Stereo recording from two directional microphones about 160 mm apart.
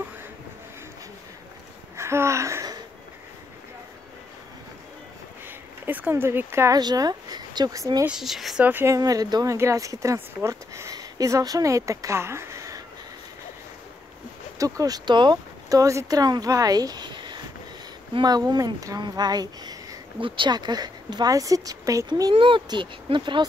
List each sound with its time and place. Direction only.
2.0 s a sound: 15° right (ahead or behind)
5.9 s speech: 10° right (ahead or behind)
8.1 s speech: centre (ahead or behind); by 12.8 s 20° right (ahead or behind)
14.6 s speech: 20° right (ahead or behind)
22.3 s speech: 30° right (ahead or behind)